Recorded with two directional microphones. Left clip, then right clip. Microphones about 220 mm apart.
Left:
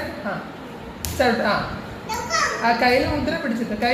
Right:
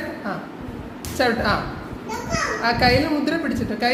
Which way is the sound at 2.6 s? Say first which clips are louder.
Left 1 dB; 20° right (ahead or behind).